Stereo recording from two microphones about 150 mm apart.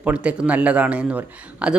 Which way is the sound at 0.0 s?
10° right (ahead or behind).